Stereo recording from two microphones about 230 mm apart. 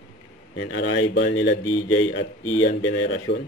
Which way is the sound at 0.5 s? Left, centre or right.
Left.